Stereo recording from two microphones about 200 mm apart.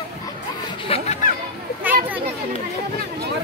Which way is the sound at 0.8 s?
30° left (ahead or behind).